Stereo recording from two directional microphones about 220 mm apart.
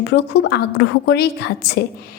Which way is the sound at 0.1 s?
50° left (ahead or behind).